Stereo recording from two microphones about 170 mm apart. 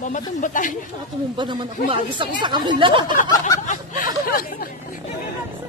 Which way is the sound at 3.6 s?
45° left (ahead or behind).